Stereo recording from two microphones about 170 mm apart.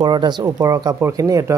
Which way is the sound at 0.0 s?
25° right (ahead or behind).